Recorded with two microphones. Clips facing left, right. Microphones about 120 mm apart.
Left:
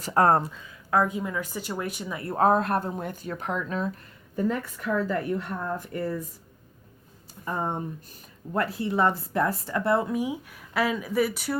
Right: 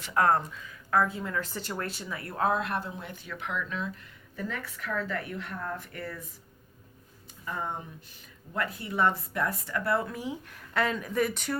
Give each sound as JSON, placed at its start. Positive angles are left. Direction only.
{"t": 0.0, "sound": "speech", "side_deg": 35}
{"t": 0.9, "sound": "a woman's voice", "side_deg": 20}
{"t": 7.4, "sound": "a woman's voice", "side_deg": 35}